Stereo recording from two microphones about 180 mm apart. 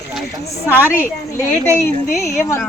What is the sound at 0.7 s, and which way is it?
A woman's voice, 15° left (ahead or behind).